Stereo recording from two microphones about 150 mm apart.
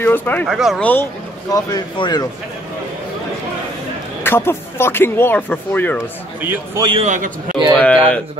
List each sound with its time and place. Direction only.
0.0 s speech: 10° left (ahead or behind)
0.5 s speech: centre (ahead or behind)
1.5 s speech: 25° left (ahead or behind)
4.2 s speech: 15° left (ahead or behind)
6.4 s a man's voice: 15° right (ahead or behind)
7.0 s a man's voice: 55° right (ahead or behind)
7.7 s speech: 10° left (ahead or behind)